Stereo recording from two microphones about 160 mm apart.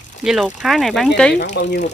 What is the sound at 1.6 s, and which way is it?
Speech, 90° left.